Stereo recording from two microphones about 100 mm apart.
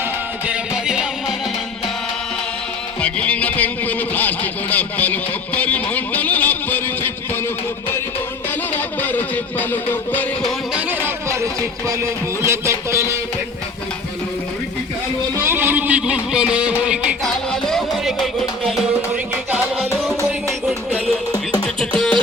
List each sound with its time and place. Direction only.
0.0 s music: 10° right (ahead or behind)
3.0 s music: 10° left (ahead or behind)
8.7 s music: 15° left (ahead or behind)
10.8 s music: 20° right (ahead or behind)
12.4 s a man's voice: 25° right (ahead or behind)
15.4 s music: 20° right (ahead or behind)
17.2 s music: 5° left (ahead or behind)
19.1 s music: 15° right (ahead or behind)
19.8 s music: centre (ahead or behind)
21.6 s music: 10° left (ahead or behind)